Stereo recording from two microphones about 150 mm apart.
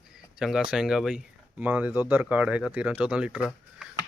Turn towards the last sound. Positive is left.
turn(degrees=-5)  # may be behind; listen again after turning